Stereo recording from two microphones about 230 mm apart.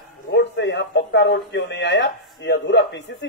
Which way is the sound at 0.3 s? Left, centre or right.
Left.